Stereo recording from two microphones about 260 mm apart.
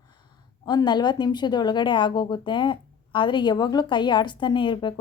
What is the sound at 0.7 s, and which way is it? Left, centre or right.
Speech, centre.